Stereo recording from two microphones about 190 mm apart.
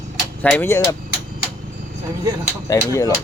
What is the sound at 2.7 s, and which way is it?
Speech, 15° left (ahead or behind).